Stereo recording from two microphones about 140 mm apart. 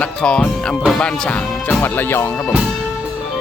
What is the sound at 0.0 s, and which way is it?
Speech, 5° left (ahead or behind).